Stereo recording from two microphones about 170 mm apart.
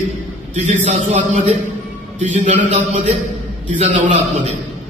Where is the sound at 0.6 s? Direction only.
40° right (ahead or behind).